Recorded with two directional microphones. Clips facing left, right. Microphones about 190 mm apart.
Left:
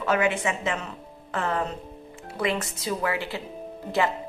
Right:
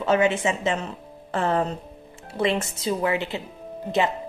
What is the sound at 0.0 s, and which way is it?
A woman's voice, 25° right (ahead or behind).